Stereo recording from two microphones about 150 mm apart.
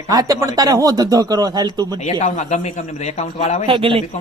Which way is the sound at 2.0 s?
50° left (ahead or behind).